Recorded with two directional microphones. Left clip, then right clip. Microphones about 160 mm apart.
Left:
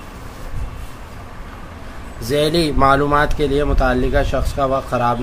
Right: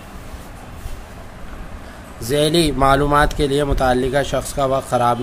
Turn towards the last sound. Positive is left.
turn(degrees=-25)  # may be behind; listen again after turning